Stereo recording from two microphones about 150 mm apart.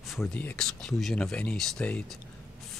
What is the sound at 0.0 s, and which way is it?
Speech, centre (ahead or behind).